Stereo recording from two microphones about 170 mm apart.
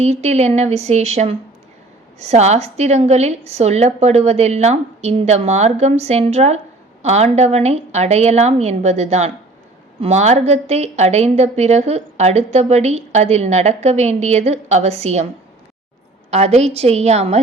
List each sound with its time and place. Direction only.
0.0 s a woman's voice: 40° right (ahead or behind)
16.3 s a woman's voice: 40° right (ahead or behind)